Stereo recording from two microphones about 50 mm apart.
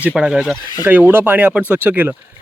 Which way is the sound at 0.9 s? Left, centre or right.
Right.